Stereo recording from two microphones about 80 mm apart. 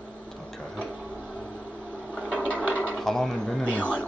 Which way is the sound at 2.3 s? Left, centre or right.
Centre.